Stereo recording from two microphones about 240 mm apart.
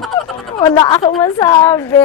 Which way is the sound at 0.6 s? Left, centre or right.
Centre.